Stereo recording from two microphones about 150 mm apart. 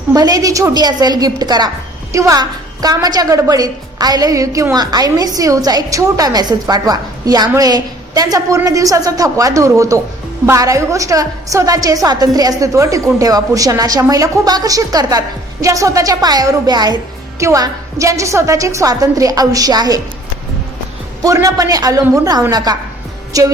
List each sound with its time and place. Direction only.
0.1 s a woman's voice: 25° right (ahead or behind)
21.2 s a woman's voice: 20° right (ahead or behind)